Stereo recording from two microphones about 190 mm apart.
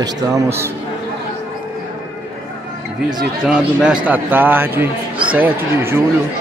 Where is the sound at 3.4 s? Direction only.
5° right (ahead or behind).